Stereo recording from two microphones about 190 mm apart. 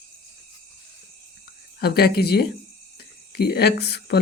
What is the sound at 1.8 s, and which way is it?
Speech, 55° left (ahead or behind).